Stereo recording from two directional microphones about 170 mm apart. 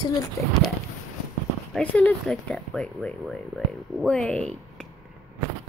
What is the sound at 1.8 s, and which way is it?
Speech, 5° left (ahead or behind).